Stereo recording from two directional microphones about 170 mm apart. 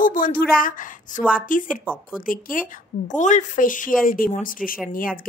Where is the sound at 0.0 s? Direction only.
50° left (ahead or behind).